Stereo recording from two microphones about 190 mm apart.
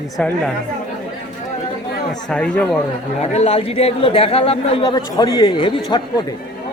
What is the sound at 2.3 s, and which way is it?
Speech, 5° left (ahead or behind).